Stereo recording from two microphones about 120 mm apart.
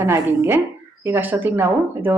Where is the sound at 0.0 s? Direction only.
20° right (ahead or behind).